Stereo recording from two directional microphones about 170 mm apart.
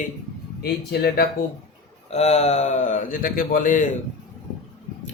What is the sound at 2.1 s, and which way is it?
A man's voice, 40° left (ahead or behind).